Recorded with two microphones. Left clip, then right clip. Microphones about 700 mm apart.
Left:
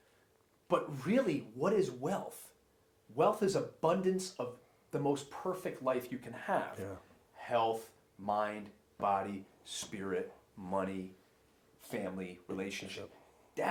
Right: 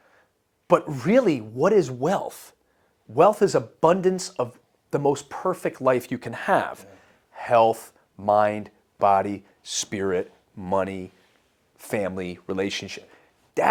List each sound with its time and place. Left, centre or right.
0.7 s speech: right
7.3 s a sound: right
8.3 s speech: right
11.8 s speech: right
13.6 s speech: right